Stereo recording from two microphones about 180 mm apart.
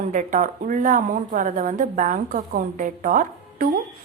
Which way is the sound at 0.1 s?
45° right (ahead or behind).